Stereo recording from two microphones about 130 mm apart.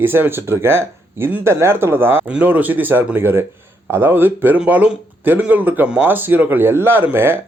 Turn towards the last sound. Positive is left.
turn(degrees=-15)  # may be behind; listen again after turning